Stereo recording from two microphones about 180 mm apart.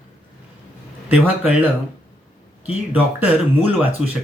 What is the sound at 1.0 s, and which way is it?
Speech, 10° right (ahead or behind).